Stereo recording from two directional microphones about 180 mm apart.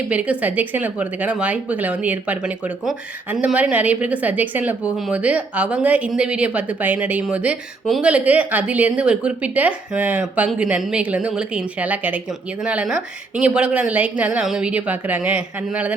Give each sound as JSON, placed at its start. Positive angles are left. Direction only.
{"t": 0.1, "sound": "speech", "side_deg": -5}